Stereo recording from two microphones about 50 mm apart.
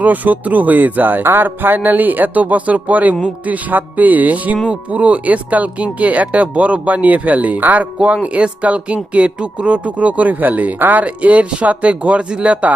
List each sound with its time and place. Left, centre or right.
0.0 s speech: right